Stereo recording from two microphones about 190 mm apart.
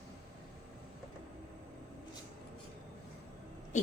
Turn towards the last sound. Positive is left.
turn(degrees=40)  # may be behind; listen again after turning